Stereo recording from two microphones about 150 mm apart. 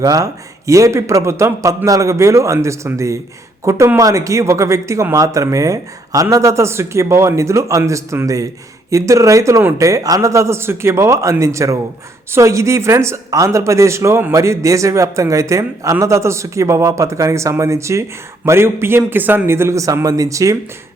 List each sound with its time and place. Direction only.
0.0 s a man's voice: 25° right (ahead or behind)